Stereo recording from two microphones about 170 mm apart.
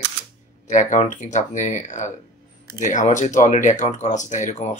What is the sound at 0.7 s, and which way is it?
Speech, 45° left (ahead or behind).